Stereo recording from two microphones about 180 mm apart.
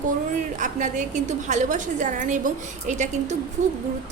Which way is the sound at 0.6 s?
45° right (ahead or behind).